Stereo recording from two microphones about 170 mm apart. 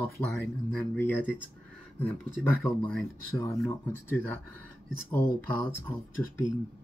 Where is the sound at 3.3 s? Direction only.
15° left (ahead or behind).